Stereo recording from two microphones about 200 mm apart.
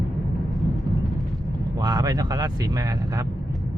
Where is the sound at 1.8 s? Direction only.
20° right (ahead or behind).